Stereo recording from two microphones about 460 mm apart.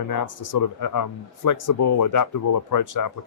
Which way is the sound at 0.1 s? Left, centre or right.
Left.